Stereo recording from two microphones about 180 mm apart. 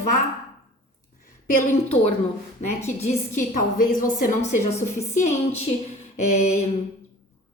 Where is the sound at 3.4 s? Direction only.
45° left (ahead or behind).